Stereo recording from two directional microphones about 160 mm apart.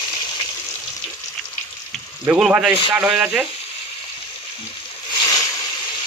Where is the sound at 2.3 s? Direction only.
5° right (ahead or behind).